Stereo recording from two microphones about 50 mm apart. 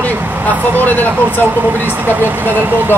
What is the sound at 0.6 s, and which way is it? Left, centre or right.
Speech, right.